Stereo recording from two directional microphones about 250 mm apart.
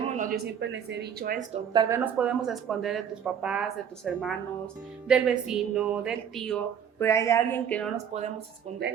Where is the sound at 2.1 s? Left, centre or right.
Centre.